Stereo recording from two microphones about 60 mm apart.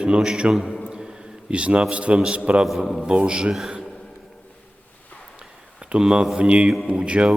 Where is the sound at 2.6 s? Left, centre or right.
Centre.